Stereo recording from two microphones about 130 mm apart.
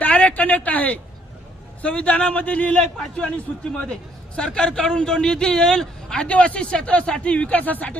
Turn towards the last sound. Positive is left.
turn(degrees=10)  # may be behind; listen again after turning